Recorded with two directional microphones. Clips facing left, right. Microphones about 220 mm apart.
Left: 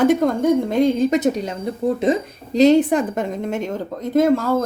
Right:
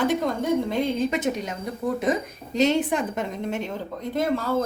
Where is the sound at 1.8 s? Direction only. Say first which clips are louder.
Left 6 dB; 25° left (ahead or behind); by 4.6 s 45° left (ahead or behind).